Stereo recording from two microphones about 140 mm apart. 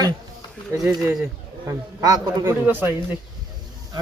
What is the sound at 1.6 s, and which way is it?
A man's voice, 25° right (ahead or behind).